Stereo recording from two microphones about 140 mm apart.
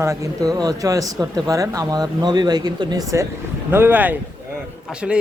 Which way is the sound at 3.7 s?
15° right (ahead or behind).